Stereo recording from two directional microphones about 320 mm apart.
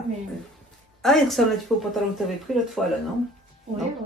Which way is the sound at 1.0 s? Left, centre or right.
Centre.